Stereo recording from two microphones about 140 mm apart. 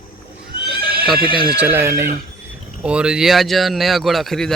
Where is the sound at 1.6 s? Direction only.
15° right (ahead or behind).